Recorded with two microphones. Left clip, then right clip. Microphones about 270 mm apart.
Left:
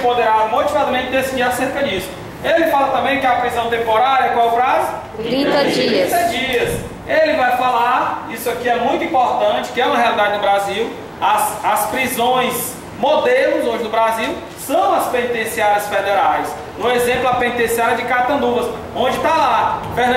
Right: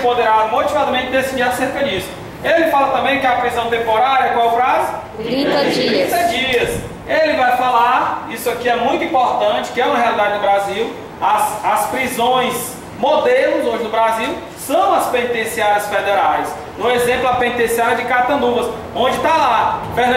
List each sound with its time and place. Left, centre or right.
0.0 s a man's voice: centre
7.1 s a man's voice: centre
9.1 s a man's voice: right
9.4 s a man's voice: centre
18.4 s a man's voice: right
19.0 s a man's voice: centre